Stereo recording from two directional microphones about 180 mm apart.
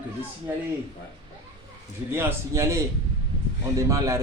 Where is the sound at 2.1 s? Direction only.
15° right (ahead or behind).